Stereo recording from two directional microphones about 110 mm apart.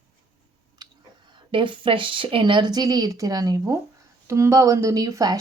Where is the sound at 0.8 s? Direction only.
40° right (ahead or behind).